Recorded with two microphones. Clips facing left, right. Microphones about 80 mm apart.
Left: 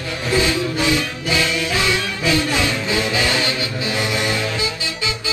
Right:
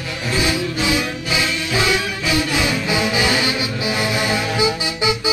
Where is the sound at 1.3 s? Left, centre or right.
Centre.